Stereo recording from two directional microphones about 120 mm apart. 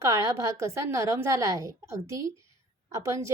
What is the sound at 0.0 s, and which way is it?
A woman's voice, 25° right (ahead or behind).